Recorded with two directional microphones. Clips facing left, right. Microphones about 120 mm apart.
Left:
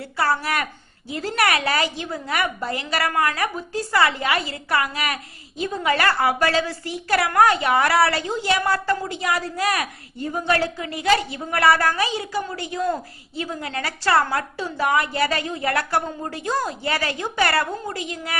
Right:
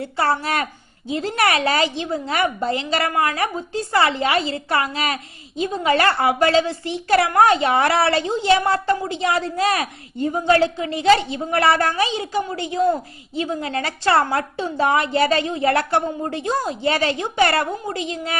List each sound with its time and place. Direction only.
0.0 s a woman's voice: 25° right (ahead or behind)